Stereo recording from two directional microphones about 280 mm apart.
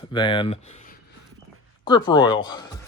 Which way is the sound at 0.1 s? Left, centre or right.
Centre.